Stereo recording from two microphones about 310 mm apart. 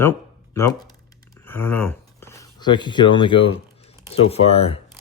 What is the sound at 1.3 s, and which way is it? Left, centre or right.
Speech, centre.